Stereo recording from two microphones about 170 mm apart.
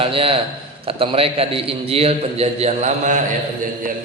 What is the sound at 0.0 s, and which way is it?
A man's voice, 30° right (ahead or behind).